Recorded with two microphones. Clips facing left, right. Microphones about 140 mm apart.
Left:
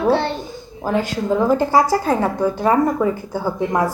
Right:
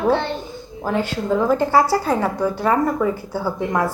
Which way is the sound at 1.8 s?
45° left (ahead or behind).